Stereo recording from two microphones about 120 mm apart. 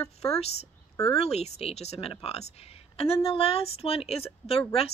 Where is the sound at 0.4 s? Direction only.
60° left (ahead or behind).